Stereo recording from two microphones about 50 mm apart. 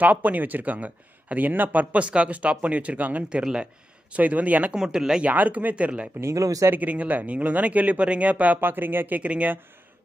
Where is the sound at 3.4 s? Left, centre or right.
Centre.